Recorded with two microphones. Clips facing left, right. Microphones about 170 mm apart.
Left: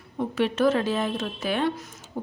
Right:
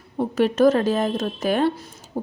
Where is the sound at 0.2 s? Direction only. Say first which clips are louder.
Right 5 dB; 40° right (ahead or behind).